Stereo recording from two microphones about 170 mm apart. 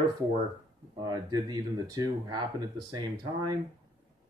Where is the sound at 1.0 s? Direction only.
25° right (ahead or behind).